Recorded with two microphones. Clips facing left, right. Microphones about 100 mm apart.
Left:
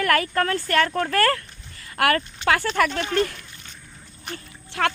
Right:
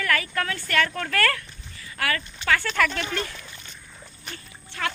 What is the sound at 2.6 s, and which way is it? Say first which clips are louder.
Speech: left 3 dB; 40° left (ahead or behind).